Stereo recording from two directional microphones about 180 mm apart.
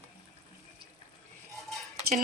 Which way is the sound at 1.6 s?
Centre (ahead or behind).